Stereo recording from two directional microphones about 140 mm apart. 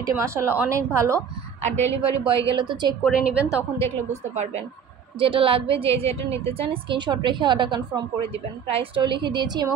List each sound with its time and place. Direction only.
0.0 s a woman's voice: 20° right (ahead or behind)
1.8 s a woman's voice: 40° right (ahead or behind)
3.0 s a woman's voice: 5° right (ahead or behind)
4.1 s a woman's voice: 50° right (ahead or behind)
5.2 s a woman's voice: 40° right (ahead or behind)